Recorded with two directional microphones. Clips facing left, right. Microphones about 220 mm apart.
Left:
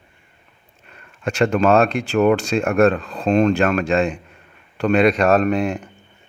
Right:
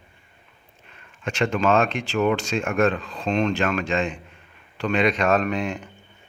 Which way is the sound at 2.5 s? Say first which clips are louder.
Left 6 dB; 40° left (ahead or behind).